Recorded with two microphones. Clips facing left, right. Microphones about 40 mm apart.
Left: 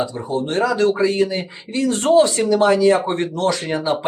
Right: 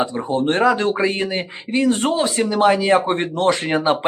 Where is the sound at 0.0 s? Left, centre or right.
Right.